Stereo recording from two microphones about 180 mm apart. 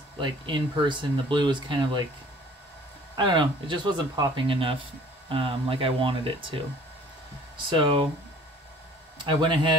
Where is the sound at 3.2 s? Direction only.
25° right (ahead or behind).